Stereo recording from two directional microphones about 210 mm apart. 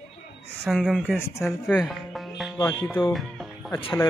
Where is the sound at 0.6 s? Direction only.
Centre (ahead or behind).